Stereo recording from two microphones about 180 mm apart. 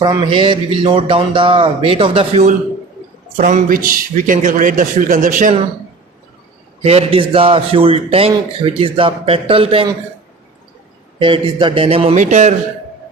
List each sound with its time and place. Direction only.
0.0 s a man's voice: 25° right (ahead or behind)
3.3 s a man's voice: 50° right (ahead or behind)
6.8 s a man's voice: 35° right (ahead or behind)
11.2 s a man's voice: 30° right (ahead or behind)